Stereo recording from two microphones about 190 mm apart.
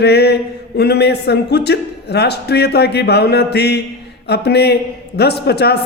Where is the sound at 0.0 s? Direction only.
60° left (ahead or behind).